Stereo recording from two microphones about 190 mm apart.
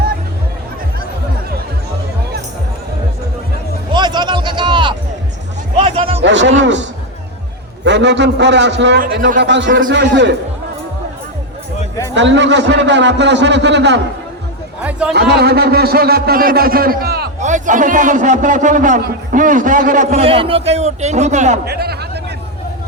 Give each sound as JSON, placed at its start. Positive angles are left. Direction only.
{"t": 3.9, "sound": "a sound", "side_deg": -25}
{"t": 5.7, "sound": "music", "side_deg": -30}
{"t": 6.2, "sound": "speech", "side_deg": -70}
{"t": 7.9, "sound": "a man's voice", "side_deg": -65}
{"t": 12.1, "sound": "a man's voice", "side_deg": -70}
{"t": 14.8, "sound": "a sound", "side_deg": -5}
{"t": 15.1, "sound": "a man's voice", "side_deg": -60}
{"t": 17.4, "sound": "a man's voice", "side_deg": -40}
{"t": 21.6, "sound": "a sound", "side_deg": -55}